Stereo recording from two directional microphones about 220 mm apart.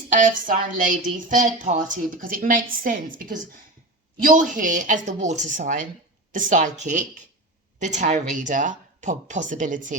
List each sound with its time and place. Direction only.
0.4 s speech: 35° right (ahead or behind)